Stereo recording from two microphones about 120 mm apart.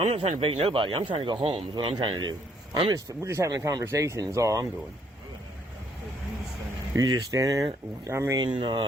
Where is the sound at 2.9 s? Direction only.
25° right (ahead or behind).